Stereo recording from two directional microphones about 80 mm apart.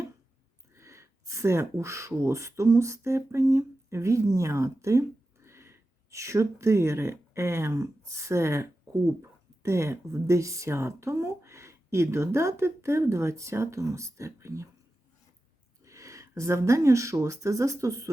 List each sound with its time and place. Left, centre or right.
0.7 s speech: right
15.8 s speech: right